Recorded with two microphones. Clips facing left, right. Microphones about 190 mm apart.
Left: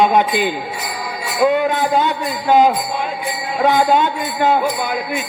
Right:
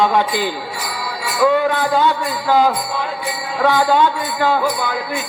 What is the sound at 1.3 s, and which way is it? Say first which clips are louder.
A man's voice: even; 20° left (ahead or behind).